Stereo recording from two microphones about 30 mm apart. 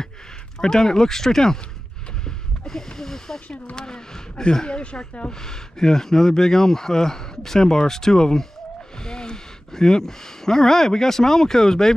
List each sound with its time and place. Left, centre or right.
0.6 s speech: centre
2.2 s a sound: centre
3.7 s speech: left
5.3 s speech: centre